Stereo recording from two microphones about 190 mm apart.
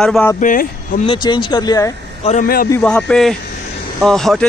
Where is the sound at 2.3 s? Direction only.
45° left (ahead or behind).